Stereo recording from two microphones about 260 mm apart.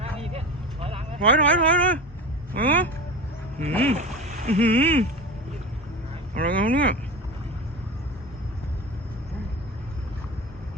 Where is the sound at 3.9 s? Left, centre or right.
Right.